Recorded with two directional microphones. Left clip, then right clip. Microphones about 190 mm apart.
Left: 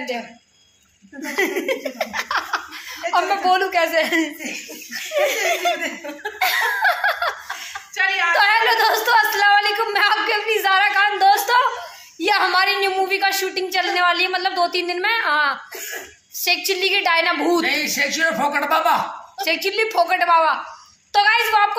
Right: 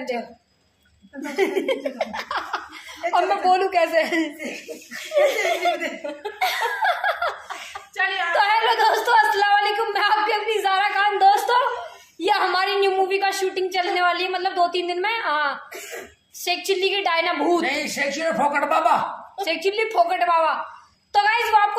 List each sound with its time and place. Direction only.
1.2 s a woman's voice: 5° left (ahead or behind)
4.4 s speech: 5° right (ahead or behind)
5.1 s a woman's voice: 10° left (ahead or behind)
5.8 s speech: centre (ahead or behind)
6.4 s laughter: 10° left (ahead or behind)
8.3 s a woman's voice: 10° left (ahead or behind)
17.6 s speech: 10° right (ahead or behind)
19.4 s a woman's voice: 10° left (ahead or behind)